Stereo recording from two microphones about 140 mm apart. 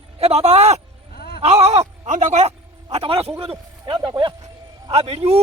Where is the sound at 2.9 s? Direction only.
40° right (ahead or behind).